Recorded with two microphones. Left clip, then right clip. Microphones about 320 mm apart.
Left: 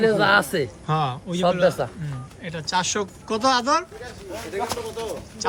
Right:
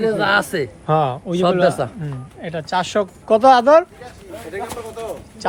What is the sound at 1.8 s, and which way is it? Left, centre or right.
Speech, right.